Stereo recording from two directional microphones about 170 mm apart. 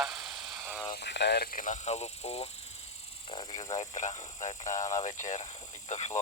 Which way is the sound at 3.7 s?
45° left (ahead or behind).